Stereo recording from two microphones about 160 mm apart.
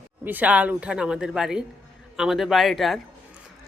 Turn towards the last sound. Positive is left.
turn(degrees=0)  # may be behind; listen again after turning